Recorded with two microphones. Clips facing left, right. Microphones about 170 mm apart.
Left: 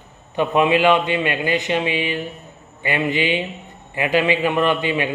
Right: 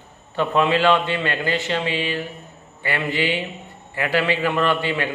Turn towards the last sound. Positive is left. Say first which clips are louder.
# left 2 dB
turn(degrees=15)  # may be behind; listen again after turning